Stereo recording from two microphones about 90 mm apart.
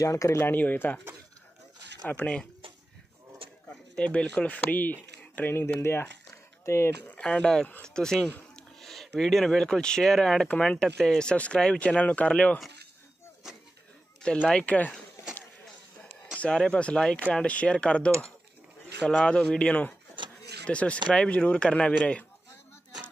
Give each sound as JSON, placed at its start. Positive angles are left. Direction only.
{"t": 0.0, "sound": "speech", "side_deg": 35}
{"t": 0.5, "sound": "speech", "side_deg": 20}
{"t": 2.0, "sound": "speech", "side_deg": 15}
{"t": 3.9, "sound": "speech", "side_deg": 10}
{"t": 7.1, "sound": "speech", "side_deg": 15}
{"t": 14.5, "sound": "speech", "side_deg": 15}
{"t": 16.3, "sound": "speech", "side_deg": 10}